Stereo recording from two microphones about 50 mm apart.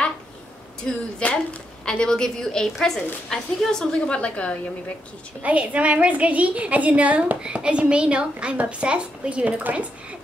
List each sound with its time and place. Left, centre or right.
0.8 s a woman's voice: centre
4.0 s a woman's voice: left
5.4 s a woman's voice: right
9.6 s speech: right